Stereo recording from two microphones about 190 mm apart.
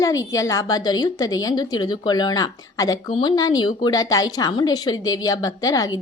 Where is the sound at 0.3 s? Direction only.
15° left (ahead or behind).